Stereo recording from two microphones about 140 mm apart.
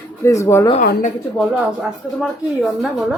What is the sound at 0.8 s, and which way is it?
Speech, 65° left (ahead or behind).